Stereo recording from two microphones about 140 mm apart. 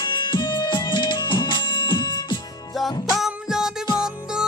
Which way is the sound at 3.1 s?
5° right (ahead or behind).